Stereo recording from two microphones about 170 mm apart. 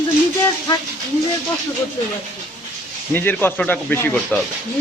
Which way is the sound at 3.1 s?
10° left (ahead or behind).